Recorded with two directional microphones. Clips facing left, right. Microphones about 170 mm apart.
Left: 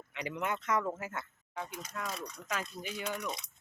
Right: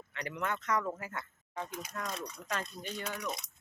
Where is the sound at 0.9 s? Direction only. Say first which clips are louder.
Left 2 dB; 25° left (ahead or behind).